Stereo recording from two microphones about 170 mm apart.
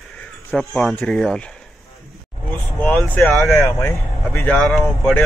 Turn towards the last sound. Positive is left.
turn(degrees=0)  # may be behind; listen again after turning